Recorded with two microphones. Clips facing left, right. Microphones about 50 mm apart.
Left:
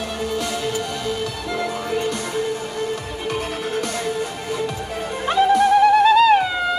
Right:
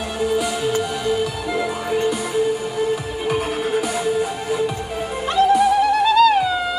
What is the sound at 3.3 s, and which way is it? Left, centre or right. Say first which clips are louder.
Music: right 4 dB; centre.